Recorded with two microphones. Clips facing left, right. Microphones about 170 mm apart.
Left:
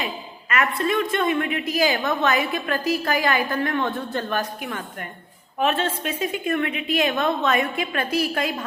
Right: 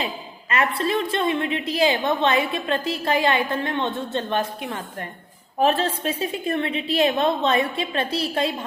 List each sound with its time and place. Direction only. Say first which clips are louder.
0.5 s a woman's voice: even; 30° right (ahead or behind)